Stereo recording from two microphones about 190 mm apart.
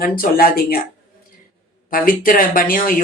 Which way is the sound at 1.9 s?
50° left (ahead or behind).